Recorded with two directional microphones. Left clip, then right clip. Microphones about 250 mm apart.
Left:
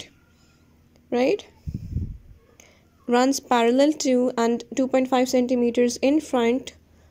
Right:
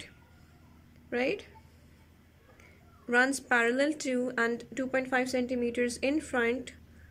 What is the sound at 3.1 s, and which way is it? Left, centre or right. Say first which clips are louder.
A woman's voice: left 6 dB; centre.